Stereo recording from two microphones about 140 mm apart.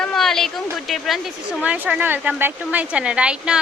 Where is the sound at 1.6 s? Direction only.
10° right (ahead or behind).